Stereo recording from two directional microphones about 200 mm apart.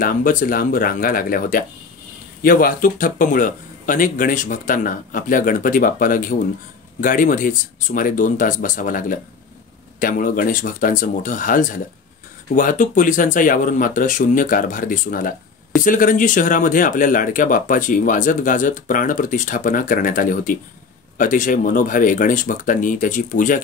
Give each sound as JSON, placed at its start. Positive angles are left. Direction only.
{"t": 0.0, "sound": "a man's voice", "side_deg": 45}